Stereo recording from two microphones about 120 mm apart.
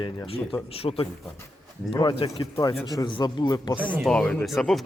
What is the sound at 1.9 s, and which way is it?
Speech, 40° left (ahead or behind).